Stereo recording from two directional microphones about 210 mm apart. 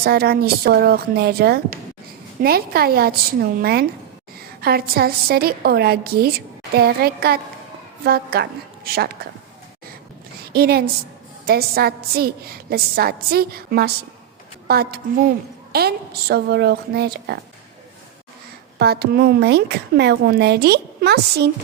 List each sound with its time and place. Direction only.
0.0 s a woman's voice: 50° right (ahead or behind)
10.5 s a woman's voice: 50° right (ahead or behind)
18.8 s a woman's voice: 50° right (ahead or behind)